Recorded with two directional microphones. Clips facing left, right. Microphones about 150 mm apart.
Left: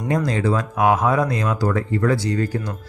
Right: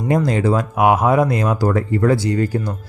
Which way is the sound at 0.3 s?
30° right (ahead or behind).